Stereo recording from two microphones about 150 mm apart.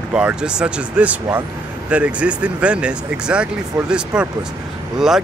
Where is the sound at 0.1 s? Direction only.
5° right (ahead or behind).